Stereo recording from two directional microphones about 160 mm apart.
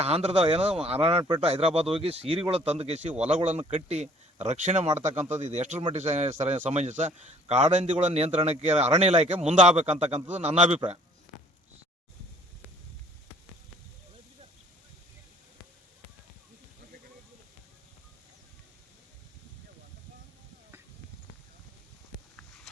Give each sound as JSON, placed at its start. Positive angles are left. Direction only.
{"t": 0.0, "sound": "a man's voice", "side_deg": -40}